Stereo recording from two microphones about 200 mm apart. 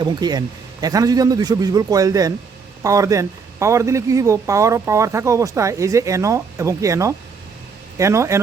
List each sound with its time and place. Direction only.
0.0 s a man's voice: 20° right (ahead or behind)